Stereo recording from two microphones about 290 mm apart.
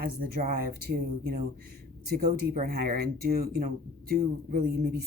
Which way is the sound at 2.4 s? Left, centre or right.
Right.